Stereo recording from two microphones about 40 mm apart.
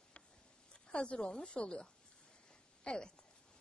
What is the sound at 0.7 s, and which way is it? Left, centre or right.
A woman's voice, left.